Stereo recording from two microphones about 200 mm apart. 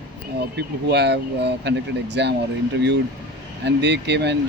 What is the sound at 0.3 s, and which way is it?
Speech, 55° right (ahead or behind).